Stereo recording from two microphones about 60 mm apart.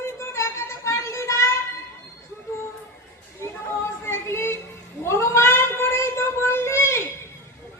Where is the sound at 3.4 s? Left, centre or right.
Left.